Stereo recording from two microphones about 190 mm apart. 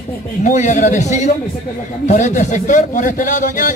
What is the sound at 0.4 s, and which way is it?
A man's voice, 40° left (ahead or behind).